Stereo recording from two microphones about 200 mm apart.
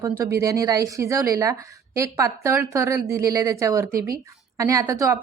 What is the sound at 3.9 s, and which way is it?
Speech, 45° right (ahead or behind).